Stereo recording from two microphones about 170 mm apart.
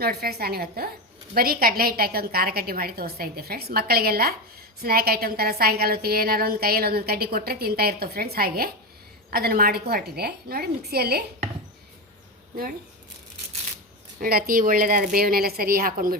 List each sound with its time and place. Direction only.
0.0 s a woman's voice: 65° right (ahead or behind)
14.2 s a woman's voice: 60° right (ahead or behind)